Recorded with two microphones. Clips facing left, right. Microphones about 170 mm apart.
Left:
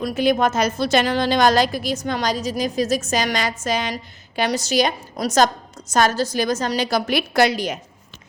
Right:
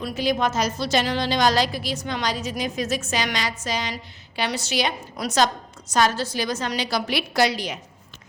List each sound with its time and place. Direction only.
0.0 s a woman's voice: 55° left (ahead or behind)